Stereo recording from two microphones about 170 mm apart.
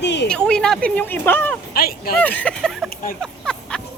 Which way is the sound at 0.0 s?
90° left.